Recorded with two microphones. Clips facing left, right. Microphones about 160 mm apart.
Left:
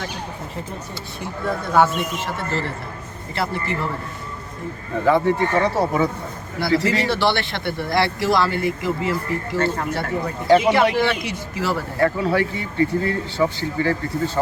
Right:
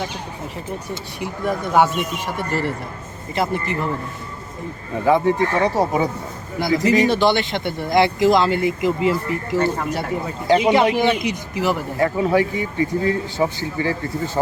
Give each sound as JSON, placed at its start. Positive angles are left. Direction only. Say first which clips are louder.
{"t": 1.2, "sound": "speech", "louder": "right 2 dB", "side_deg": -15}
{"t": 5.0, "sound": "speech", "louder": "right 1 dB", "side_deg": -15}